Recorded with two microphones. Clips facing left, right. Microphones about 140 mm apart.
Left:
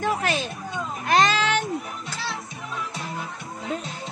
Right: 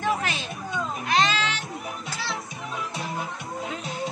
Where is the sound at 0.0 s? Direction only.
45° left (ahead or behind).